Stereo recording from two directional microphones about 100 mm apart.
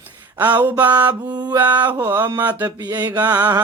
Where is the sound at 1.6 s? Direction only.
45° right (ahead or behind).